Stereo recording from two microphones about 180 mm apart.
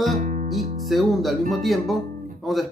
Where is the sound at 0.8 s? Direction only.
Centre (ahead or behind).